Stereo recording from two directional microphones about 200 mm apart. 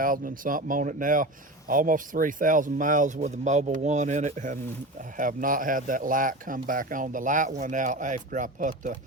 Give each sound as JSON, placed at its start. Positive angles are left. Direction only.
{"t": 0.0, "sound": "speech", "side_deg": -45}